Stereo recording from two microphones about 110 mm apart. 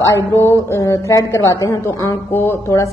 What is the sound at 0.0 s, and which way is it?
A woman's voice, 25° left (ahead or behind).